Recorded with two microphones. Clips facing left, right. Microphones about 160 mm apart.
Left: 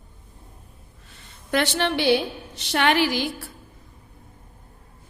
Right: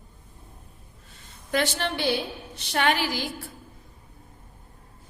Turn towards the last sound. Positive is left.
turn(degrees=70)  # may be behind; listen again after turning